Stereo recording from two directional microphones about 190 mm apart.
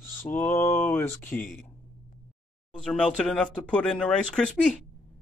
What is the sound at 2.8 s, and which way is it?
Speech, 5° left (ahead or behind).